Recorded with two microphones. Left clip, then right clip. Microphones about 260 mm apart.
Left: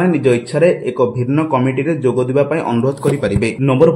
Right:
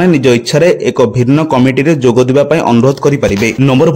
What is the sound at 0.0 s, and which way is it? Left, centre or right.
A man's voice, right.